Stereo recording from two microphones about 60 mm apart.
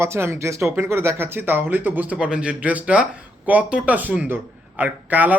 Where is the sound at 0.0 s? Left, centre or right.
Right.